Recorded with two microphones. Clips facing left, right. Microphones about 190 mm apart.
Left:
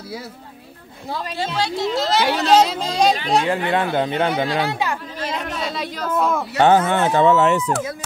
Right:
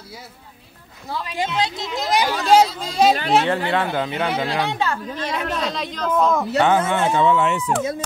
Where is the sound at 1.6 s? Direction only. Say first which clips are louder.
Left 3 dB; 20° right (ahead or behind).